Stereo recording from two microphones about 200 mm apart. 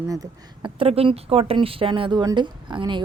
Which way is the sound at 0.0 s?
15° right (ahead or behind).